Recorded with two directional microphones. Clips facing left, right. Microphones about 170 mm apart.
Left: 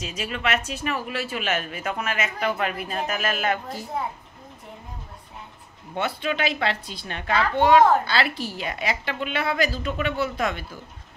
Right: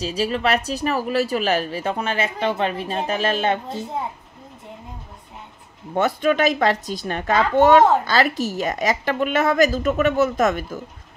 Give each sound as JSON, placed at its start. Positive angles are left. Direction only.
{"t": 0.0, "sound": "speech", "side_deg": -35}
{"t": 5.9, "sound": "a woman's voice", "side_deg": -45}